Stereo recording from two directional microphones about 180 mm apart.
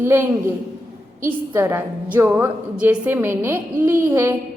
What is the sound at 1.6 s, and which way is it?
A woman's voice, 15° right (ahead or behind).